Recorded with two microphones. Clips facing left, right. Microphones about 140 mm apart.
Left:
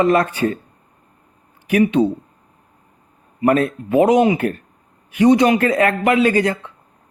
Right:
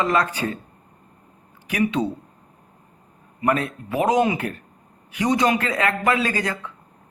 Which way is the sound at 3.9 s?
25° left (ahead or behind).